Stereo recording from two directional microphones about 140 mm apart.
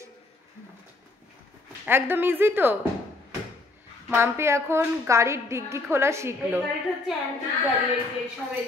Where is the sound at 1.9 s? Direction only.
15° right (ahead or behind).